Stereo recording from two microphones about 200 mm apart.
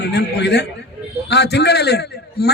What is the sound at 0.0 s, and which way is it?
A man's voice, 55° left (ahead or behind).